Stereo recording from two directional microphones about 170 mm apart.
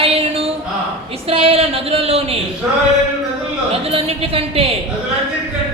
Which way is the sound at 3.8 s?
35° right (ahead or behind).